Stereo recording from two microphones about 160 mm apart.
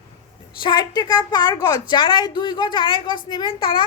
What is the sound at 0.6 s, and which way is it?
A woman's voice, 25° left (ahead or behind).